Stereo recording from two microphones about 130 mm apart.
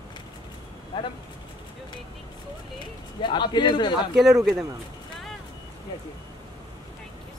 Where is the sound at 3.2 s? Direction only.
35° left (ahead or behind).